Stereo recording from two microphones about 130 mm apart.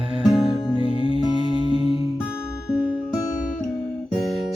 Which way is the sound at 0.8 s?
45° left (ahead or behind).